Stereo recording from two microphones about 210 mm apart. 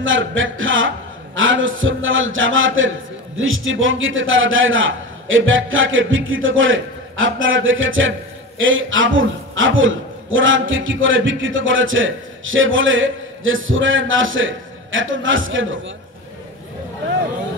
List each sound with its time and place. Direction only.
0.0 s a man's voice: 65° right (ahead or behind)